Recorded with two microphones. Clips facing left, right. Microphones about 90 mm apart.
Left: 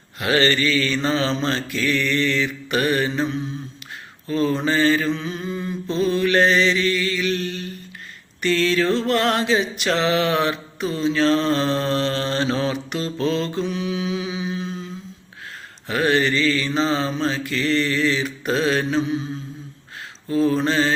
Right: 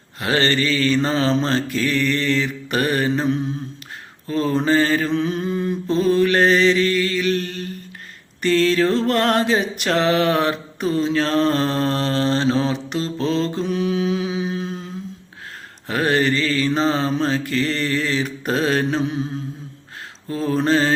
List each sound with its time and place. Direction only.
0.2 s mantra: 35° right (ahead or behind); by 14.8 s 50° right (ahead or behind)
15.9 s mantra: 40° right (ahead or behind); by 19.3 s 55° right (ahead or behind)
20.2 s mantra: 40° right (ahead or behind)